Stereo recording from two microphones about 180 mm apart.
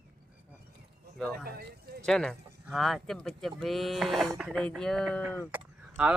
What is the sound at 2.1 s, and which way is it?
Speech, centre (ahead or behind).